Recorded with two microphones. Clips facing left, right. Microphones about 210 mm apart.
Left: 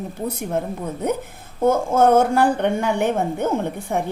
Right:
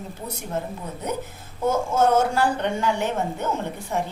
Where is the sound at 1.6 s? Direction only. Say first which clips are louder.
Left 5 dB; 55° left (ahead or behind).